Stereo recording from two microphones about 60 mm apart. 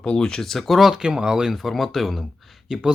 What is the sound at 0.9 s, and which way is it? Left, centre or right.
Speech, centre.